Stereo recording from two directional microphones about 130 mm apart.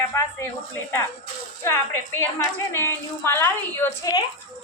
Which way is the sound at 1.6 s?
15° left (ahead or behind).